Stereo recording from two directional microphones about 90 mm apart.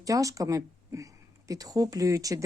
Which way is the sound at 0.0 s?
40° right (ahead or behind).